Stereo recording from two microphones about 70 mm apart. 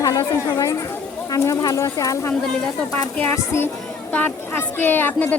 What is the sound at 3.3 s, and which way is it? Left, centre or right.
A woman's voice, left.